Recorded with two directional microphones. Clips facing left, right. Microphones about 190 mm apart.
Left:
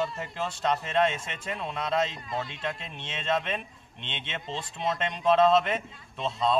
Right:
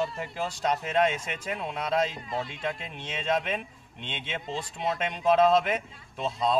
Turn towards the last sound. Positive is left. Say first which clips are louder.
# right 1 dB
turn(degrees=-5)  # may be behind; listen again after turning